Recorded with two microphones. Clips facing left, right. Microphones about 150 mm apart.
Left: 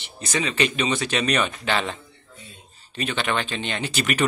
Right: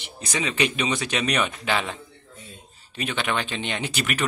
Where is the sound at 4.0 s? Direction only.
Centre (ahead or behind).